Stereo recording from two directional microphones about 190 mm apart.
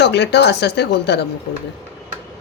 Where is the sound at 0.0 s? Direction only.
65° left (ahead or behind).